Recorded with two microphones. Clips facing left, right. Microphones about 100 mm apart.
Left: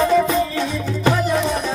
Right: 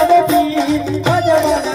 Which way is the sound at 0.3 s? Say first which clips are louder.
Right 7 dB; 90° right.